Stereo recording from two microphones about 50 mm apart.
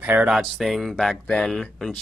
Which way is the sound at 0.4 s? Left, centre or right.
Centre.